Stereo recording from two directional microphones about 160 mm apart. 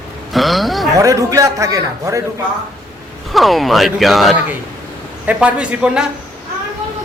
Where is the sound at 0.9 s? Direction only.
20° right (ahead or behind).